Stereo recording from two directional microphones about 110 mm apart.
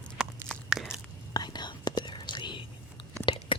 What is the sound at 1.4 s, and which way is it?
Whispering, 40° left (ahead or behind).